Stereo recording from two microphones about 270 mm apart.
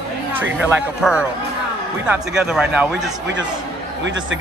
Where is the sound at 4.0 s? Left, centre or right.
Right.